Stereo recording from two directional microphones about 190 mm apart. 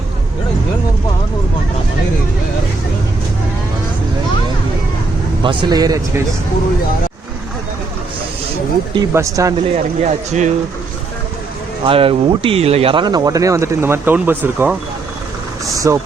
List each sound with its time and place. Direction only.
5.4 s speech: 25° right (ahead or behind)
9.0 s speech: 15° right (ahead or behind)
9.7 s speech: 40° right (ahead or behind)
11.9 s speech: 30° right (ahead or behind)